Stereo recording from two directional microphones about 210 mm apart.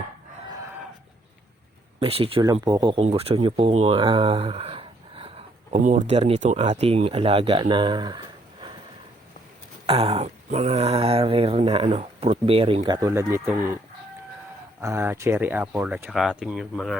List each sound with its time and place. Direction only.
2.0 s speech: 25° right (ahead or behind)
9.8 s speech: 30° right (ahead or behind); by 13.7 s 10° right (ahead or behind)
14.8 s speech: 10° right (ahead or behind)